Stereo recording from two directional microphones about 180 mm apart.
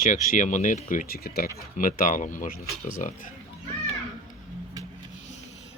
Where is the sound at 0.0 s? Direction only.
45° left (ahead or behind).